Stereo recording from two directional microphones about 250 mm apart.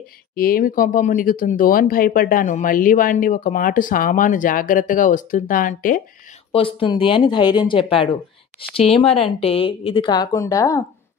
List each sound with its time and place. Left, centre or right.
0.4 s speech: left
6.5 s speech: left